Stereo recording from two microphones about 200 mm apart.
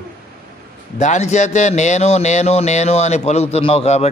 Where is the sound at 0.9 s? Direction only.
35° left (ahead or behind).